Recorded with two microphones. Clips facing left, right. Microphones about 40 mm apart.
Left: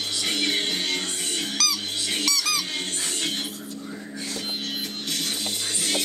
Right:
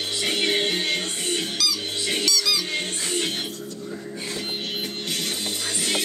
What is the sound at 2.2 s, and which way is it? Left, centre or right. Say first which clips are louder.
Squeak: right 2 dB; left.